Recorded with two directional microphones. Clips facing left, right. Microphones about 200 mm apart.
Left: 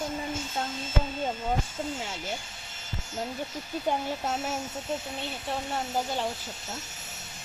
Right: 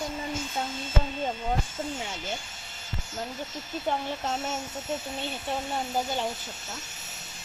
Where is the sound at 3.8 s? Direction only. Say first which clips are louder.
Left 1 dB; 5° left (ahead or behind).